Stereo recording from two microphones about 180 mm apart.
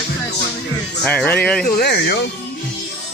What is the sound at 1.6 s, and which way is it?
Speech, 60° left (ahead or behind).